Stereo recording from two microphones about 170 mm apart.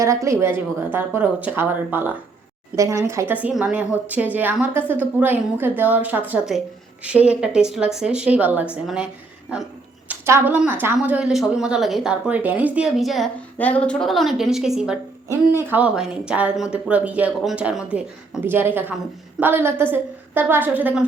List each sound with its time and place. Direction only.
0.0 s a woman's voice: 20° right (ahead or behind)
10.1 s a woman's voice: 15° right (ahead or behind)